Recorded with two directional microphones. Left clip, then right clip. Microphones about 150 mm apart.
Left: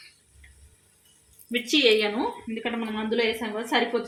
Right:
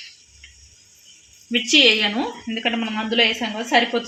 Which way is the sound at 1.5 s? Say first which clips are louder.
Right 6 dB; 60° right (ahead or behind).